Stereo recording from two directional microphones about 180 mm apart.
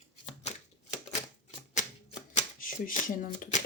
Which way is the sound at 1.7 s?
40° left (ahead or behind).